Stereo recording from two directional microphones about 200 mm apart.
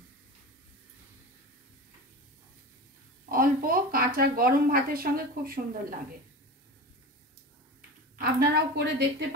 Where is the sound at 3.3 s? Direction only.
45° right (ahead or behind).